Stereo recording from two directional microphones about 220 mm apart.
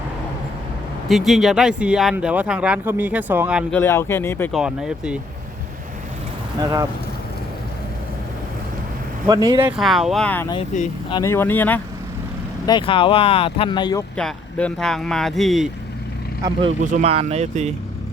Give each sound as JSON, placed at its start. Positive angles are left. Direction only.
{"t": 1.0, "sound": "speech", "side_deg": 0}
{"t": 3.7, "sound": "speech", "side_deg": 10}
{"t": 4.6, "sound": "speech", "side_deg": -5}
{"t": 6.6, "sound": "speech", "side_deg": -15}
{"t": 9.2, "sound": "speech", "side_deg": -20}
{"t": 9.6, "sound": "speech", "side_deg": 0}
{"t": 10.7, "sound": "speech", "side_deg": 35}
{"t": 11.1, "sound": "speech", "side_deg": 15}
{"t": 12.6, "sound": "speech", "side_deg": 20}
{"t": 14.2, "sound": "speech", "side_deg": 5}
{"t": 16.4, "sound": "speech", "side_deg": -25}